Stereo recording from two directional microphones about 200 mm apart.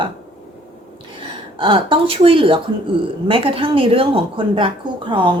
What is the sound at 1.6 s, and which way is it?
A woman's voice, 25° right (ahead or behind).